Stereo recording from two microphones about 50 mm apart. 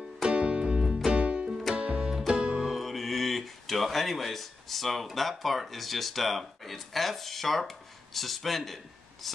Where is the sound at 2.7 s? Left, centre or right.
Centre.